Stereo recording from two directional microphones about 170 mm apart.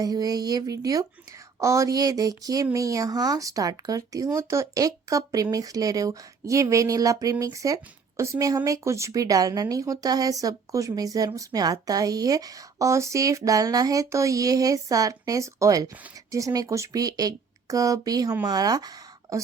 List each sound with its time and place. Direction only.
0.0 s speech: 20° right (ahead or behind)